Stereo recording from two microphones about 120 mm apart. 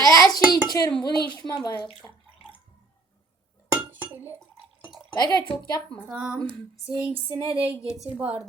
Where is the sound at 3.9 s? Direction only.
15° right (ahead or behind).